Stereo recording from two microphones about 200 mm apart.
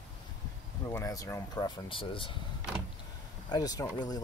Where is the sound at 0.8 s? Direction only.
15° left (ahead or behind).